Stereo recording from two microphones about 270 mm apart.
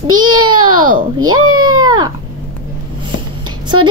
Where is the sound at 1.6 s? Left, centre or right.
Centre.